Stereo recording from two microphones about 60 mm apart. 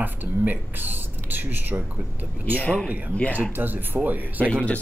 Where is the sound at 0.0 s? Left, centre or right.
Right.